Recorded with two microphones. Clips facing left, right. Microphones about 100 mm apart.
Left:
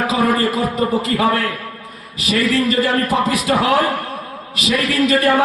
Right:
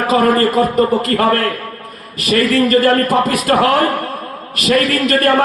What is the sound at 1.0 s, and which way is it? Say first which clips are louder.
A man's voice: right 3 dB; 55° right (ahead or behind).